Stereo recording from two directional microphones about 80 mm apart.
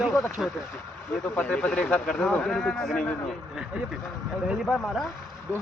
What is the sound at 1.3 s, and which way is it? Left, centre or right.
Speech, centre.